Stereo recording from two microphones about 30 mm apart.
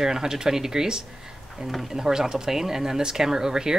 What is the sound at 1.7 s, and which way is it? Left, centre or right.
A woman's voice, centre.